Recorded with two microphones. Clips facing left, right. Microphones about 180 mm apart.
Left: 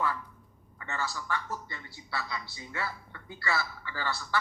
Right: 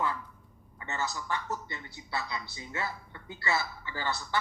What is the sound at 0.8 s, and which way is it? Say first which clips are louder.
A woman's voice: right 1 dB; 20° right (ahead or behind).